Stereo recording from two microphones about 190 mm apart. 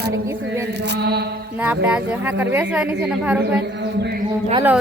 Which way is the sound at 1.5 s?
10° right (ahead or behind).